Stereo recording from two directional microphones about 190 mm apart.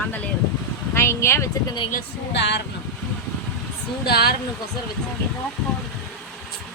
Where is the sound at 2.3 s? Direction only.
65° left (ahead or behind).